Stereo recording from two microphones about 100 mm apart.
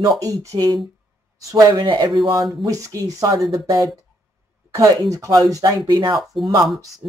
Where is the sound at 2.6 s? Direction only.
35° right (ahead or behind).